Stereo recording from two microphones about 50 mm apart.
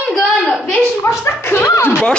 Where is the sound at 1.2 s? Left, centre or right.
Left.